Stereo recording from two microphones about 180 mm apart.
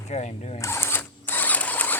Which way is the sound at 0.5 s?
15° left (ahead or behind).